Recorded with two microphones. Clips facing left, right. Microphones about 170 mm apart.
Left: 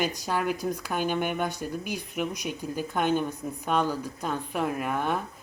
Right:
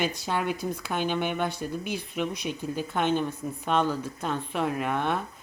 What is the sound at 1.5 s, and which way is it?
Speech, 45° left (ahead or behind).